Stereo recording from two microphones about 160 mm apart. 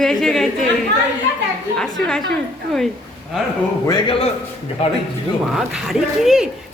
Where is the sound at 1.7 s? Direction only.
5° left (ahead or behind).